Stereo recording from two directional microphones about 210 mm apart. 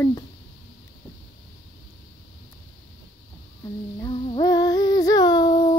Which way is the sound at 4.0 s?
25° left (ahead or behind).